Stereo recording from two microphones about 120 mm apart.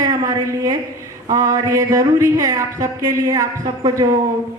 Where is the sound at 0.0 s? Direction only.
30° right (ahead or behind).